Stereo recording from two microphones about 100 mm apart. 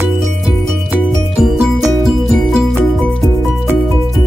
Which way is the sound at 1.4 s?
Centre (ahead or behind).